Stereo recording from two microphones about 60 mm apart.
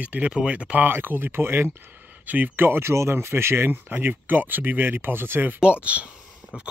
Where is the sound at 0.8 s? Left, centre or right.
Right.